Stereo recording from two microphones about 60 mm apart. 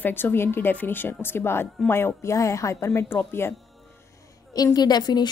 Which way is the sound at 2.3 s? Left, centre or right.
Left.